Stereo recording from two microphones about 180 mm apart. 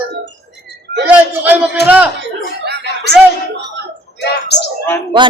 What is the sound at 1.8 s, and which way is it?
Speech, 65° left (ahead or behind).